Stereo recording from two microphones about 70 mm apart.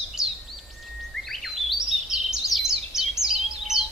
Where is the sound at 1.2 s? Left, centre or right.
Centre.